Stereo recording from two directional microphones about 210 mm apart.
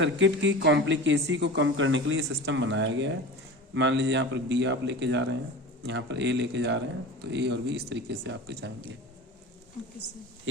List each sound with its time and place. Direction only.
0.0 s speech: 60° right (ahead or behind)